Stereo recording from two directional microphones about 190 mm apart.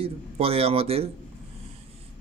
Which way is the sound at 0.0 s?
30° right (ahead or behind).